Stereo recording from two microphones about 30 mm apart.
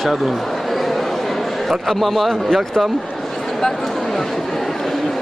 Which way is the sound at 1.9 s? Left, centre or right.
Centre.